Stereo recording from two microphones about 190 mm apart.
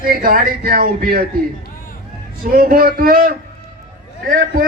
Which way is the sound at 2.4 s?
50° right (ahead or behind).